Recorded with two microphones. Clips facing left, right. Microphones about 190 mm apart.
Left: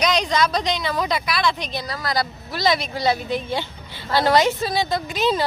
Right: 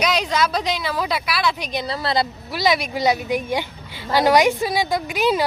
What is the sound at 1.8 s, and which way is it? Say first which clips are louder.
Speech: right 4 dB; 25° right (ahead or behind).